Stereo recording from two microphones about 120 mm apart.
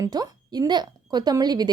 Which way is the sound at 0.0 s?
35° right (ahead or behind).